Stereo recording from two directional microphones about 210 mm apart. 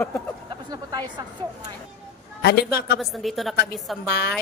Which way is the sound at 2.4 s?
50° left (ahead or behind).